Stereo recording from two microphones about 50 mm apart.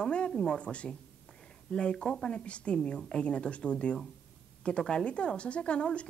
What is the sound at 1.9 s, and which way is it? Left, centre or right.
A woman's voice, centre.